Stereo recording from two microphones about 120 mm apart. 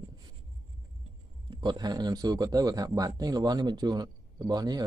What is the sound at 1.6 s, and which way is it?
A man's voice, 35° right (ahead or behind).